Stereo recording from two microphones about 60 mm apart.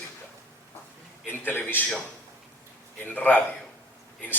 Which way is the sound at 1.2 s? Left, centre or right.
Left.